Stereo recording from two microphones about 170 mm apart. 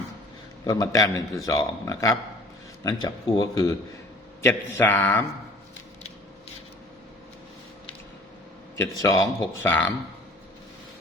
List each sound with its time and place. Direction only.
0.6 s a man's voice: 20° left (ahead or behind)
8.8 s speech: 20° left (ahead or behind)